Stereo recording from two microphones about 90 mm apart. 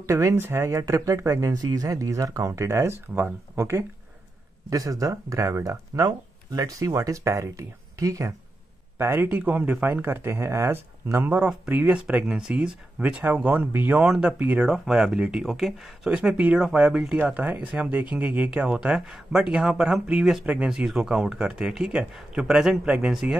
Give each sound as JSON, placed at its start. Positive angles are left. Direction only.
{"t": 0.0, "sound": "speech", "side_deg": -35}
{"t": 4.6, "sound": "speech", "side_deg": -40}
{"t": 8.9, "sound": "speech", "side_deg": -25}
{"t": 10.0, "sound": "speech", "side_deg": -25}
{"t": 11.3, "sound": "speech", "side_deg": -15}
{"t": 14.9, "sound": "speech", "side_deg": -5}